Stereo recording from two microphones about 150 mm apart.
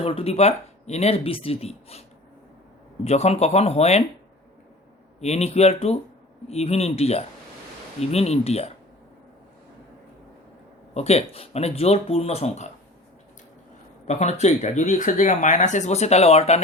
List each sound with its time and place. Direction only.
0.0 s speech: 40° left (ahead or behind)
5.2 s speech: 45° left (ahead or behind)
10.9 s speech: 45° left (ahead or behind)
14.1 s speech: 50° left (ahead or behind)